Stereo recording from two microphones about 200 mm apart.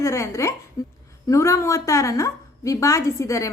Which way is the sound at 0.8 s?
15° left (ahead or behind).